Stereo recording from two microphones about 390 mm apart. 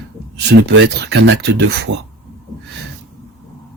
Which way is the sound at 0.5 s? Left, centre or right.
Right.